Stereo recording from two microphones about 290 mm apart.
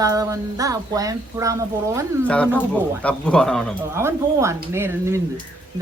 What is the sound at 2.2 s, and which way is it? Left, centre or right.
Speech, centre.